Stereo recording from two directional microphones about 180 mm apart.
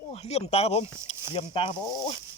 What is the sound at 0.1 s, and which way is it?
A man's voice, 35° left (ahead or behind).